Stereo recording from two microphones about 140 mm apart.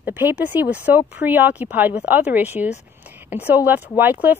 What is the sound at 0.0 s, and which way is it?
Speech, 15° right (ahead or behind).